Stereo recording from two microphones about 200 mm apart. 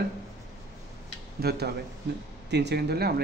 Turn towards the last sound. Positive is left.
turn(degrees=-55)  # may be behind; listen again after turning